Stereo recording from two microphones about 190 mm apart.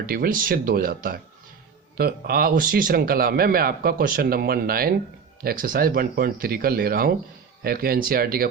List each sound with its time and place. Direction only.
0.0 s a man's voice: 50° right (ahead or behind)